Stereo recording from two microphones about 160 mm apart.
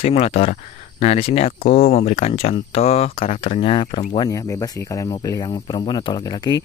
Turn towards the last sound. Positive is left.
turn(degrees=25)  # may be behind; listen again after turning